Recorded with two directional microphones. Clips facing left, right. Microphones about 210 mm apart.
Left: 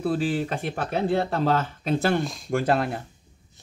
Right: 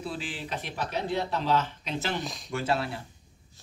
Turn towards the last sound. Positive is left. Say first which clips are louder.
# left 6 dB
turn(degrees=55)  # may be behind; listen again after turning